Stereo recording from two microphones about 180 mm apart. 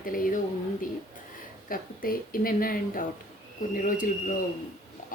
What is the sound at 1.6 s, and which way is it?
Speech, 50° left (ahead or behind).